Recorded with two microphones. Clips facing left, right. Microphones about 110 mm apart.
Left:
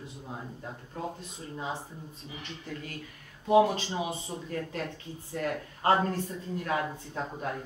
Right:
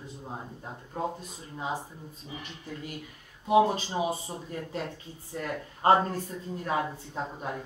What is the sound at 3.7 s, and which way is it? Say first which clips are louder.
Speech: right 3 dB; 30° right (ahead or behind).